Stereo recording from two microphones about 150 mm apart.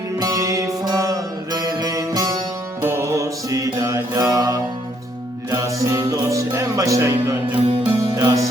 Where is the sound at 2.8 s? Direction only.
20° right (ahead or behind).